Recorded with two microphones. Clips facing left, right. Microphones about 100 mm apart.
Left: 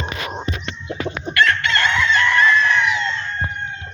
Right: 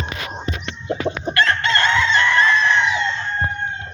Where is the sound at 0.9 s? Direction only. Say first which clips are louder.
Right 3 dB; 30° right (ahead or behind).